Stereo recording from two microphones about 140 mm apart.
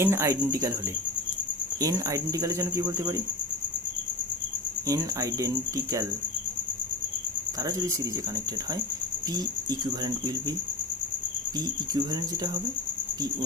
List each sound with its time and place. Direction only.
0.0 s speech: 20° right (ahead or behind)
1.8 s speech: 25° right (ahead or behind)
4.9 s speech: 25° right (ahead or behind)
7.6 s speech: 20° right (ahead or behind)
9.3 s speech: 30° right (ahead or behind)
11.5 s speech: 30° right (ahead or behind)